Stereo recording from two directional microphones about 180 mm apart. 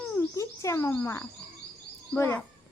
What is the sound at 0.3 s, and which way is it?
A woman's voice, 15° left (ahead or behind).